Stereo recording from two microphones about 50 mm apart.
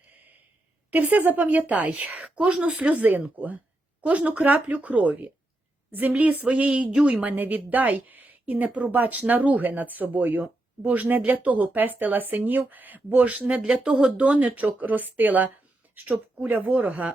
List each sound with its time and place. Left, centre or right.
0.9 s a woman's voice: right
2.8 s a woman's voice: right